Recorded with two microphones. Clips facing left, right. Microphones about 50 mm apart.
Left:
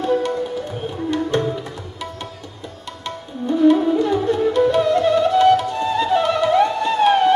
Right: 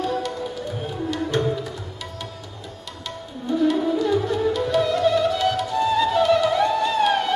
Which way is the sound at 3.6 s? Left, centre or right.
Left.